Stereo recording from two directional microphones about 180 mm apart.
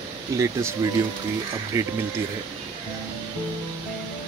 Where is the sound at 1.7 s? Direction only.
15° right (ahead or behind).